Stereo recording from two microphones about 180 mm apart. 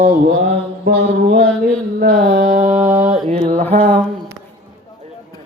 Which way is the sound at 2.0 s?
50° right (ahead or behind).